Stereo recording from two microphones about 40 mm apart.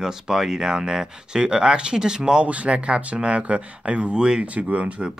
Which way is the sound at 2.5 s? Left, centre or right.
Right.